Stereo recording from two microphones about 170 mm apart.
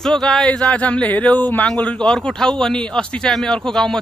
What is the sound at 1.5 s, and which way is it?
A man's voice, 5° left (ahead or behind).